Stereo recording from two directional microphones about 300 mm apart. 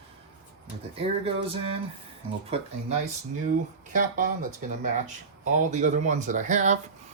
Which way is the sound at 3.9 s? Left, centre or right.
Right.